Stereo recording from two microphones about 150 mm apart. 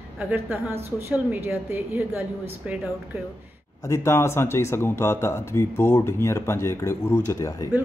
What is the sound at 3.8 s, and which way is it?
Speech, 20° left (ahead or behind).